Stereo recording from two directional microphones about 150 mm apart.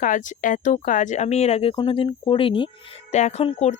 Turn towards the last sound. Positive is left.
turn(degrees=45)  # may be behind; listen again after turning